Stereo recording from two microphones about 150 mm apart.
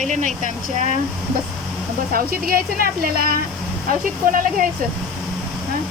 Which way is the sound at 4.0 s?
65° right (ahead or behind).